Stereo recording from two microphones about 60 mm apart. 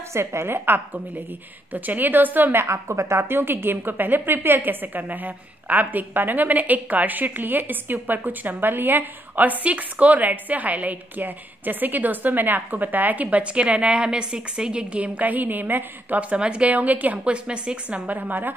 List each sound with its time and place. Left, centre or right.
0.1 s a woman's voice: right